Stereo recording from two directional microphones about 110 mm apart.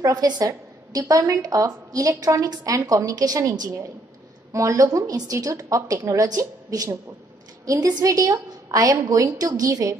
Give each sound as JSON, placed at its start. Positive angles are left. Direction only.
{"t": 0.0, "sound": "a woman's voice", "side_deg": -35}